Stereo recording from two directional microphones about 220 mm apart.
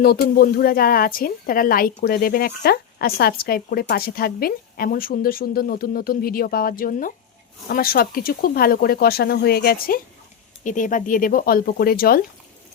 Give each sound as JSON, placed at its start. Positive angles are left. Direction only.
{"t": 0.0, "sound": "speech", "side_deg": 45}